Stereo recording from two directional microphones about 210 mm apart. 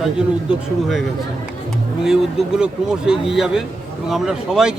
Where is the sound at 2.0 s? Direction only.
Centre (ahead or behind).